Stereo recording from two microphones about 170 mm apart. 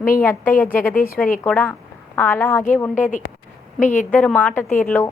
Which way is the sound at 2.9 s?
45° left (ahead or behind).